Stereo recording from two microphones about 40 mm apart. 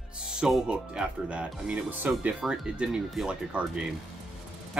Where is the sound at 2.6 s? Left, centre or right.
Right.